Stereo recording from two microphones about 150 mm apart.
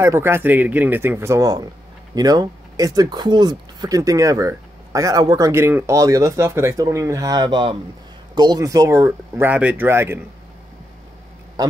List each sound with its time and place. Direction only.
0.0 s speech: 15° right (ahead or behind)
9.5 s speech: 10° right (ahead or behind)